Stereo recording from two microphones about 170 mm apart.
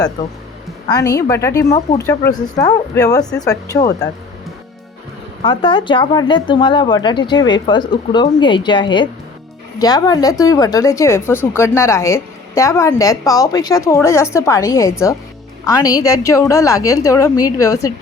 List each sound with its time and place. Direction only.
0.2 s speech: 25° left (ahead or behind)
5.4 s a woman's voice: 30° left (ahead or behind)